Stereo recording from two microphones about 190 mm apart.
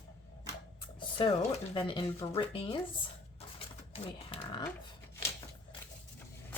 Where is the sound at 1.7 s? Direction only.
25° left (ahead or behind).